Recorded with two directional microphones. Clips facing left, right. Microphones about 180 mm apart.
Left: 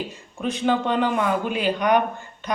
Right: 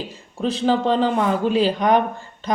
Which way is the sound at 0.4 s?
30° right (ahead or behind).